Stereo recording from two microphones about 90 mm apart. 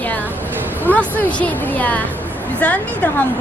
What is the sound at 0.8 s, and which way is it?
Speech, 20° left (ahead or behind).